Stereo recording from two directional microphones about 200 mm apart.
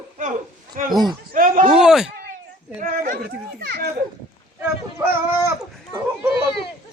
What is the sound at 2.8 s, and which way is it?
A child's voice, 40° right (ahead or behind).